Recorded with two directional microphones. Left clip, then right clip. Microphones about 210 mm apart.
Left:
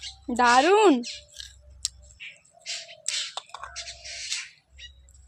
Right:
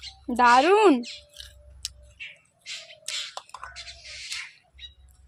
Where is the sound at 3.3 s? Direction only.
5° right (ahead or behind).